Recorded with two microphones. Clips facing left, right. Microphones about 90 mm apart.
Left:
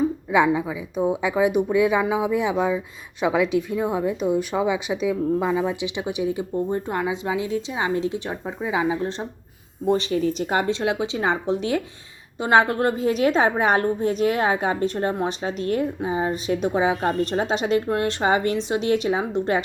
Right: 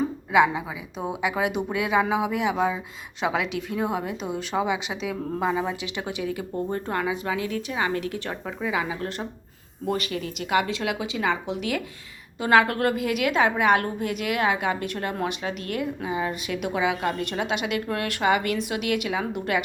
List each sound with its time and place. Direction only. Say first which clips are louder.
0.3 s speech: even; 20° right (ahead or behind)
5.8 s a woman's voice: left 5 dB; 20° left (ahead or behind)